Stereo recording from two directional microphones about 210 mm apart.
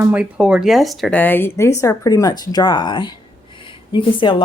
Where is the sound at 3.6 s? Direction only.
25° left (ahead or behind).